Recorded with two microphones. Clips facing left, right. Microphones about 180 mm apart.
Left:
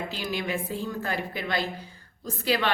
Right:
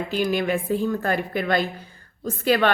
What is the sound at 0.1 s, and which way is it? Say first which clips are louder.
A woman's voice: right 8 dB; 55° right (ahead or behind).